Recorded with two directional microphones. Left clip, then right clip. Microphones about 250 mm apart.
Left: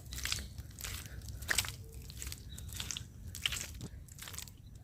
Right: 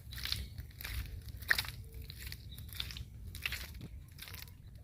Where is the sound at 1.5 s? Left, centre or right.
Centre.